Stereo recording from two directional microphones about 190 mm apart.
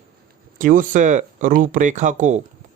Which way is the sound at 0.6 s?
45° right (ahead or behind).